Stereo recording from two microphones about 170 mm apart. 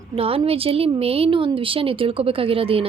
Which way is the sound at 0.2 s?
35° right (ahead or behind).